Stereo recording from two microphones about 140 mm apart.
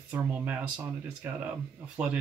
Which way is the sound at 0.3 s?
10° right (ahead or behind).